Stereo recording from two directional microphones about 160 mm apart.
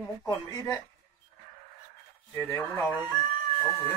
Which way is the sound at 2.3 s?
15° left (ahead or behind).